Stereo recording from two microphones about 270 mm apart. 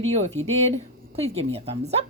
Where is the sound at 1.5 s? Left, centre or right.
Right.